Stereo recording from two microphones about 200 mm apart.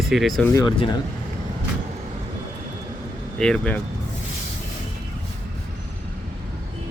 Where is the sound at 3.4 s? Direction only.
5° left (ahead or behind).